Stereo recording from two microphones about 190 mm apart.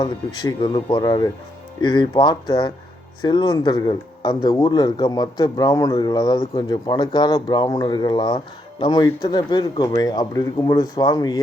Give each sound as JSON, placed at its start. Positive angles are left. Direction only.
{"t": 0.0, "sound": "speech", "side_deg": 20}